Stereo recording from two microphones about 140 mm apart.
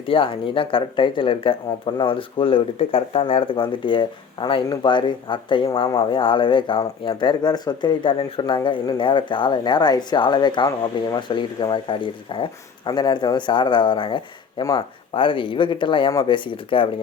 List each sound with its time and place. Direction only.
0.1 s speech: 35° left (ahead or behind)